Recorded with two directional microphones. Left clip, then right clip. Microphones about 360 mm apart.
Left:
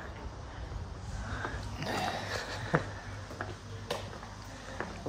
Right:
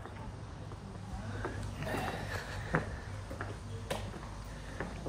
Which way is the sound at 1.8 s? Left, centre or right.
Left.